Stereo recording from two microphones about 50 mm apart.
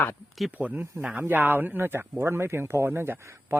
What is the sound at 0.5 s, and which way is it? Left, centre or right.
Speech, right.